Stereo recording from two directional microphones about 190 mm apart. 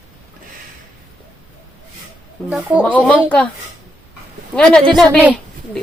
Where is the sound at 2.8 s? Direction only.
10° left (ahead or behind).